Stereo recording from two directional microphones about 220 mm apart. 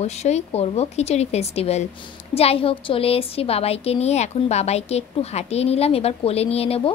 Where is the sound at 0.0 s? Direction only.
30° left (ahead or behind).